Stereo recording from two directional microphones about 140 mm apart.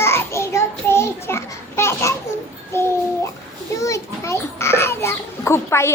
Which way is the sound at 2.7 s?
20° left (ahead or behind).